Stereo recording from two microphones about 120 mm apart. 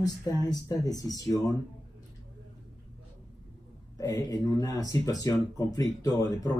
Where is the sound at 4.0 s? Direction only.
30° left (ahead or behind).